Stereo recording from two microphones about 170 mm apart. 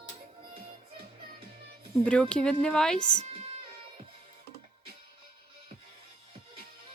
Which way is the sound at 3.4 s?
40° right (ahead or behind).